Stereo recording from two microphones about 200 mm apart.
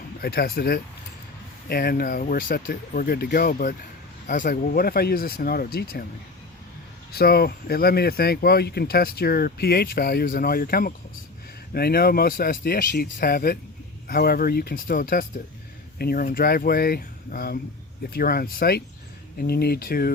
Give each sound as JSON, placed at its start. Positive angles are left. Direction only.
{"t": 0.2, "sound": "speech", "side_deg": 50}
{"t": 7.1, "sound": "speech", "side_deg": 50}